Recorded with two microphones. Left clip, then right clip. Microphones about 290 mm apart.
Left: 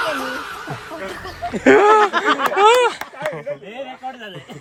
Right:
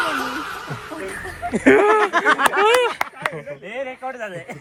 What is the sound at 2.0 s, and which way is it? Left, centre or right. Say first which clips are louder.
Speech: even; right.